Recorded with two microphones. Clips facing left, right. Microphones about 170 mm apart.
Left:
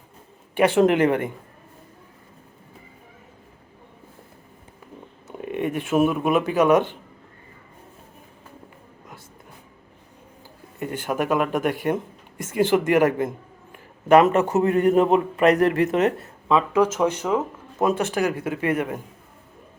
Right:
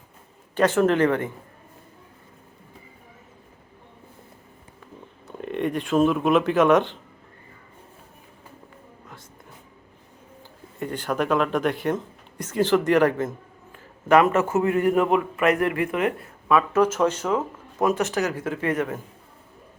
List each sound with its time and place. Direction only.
0.5 s speech: 15° left (ahead or behind)
5.3 s a sound: 10° left (ahead or behind)
6.1 s speech: centre (ahead or behind)
10.8 s a man's voice: 10° left (ahead or behind); by 15.5 s 25° left (ahead or behind)
15.5 s speech: 40° left (ahead or behind)
17.0 s speech: 15° left (ahead or behind)
17.7 s a man's voice: 25° left (ahead or behind)
18.1 s speech: 15° left (ahead or behind)